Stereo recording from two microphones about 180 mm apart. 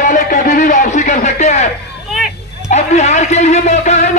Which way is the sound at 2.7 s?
40° left (ahead or behind).